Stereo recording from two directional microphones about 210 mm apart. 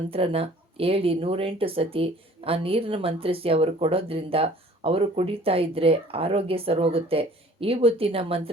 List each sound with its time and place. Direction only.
0.1 s speech: 25° right (ahead or behind)